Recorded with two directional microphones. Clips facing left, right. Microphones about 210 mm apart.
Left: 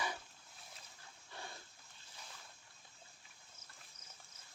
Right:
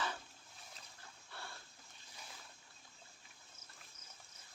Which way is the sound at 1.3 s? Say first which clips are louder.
Left 2 dB; 15° left (ahead or behind).